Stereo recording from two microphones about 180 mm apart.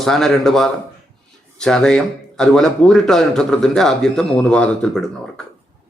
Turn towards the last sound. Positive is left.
turn(degrees=5)  # may be behind; listen again after turning